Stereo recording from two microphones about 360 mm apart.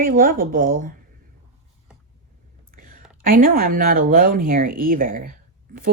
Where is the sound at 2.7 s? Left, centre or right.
Right.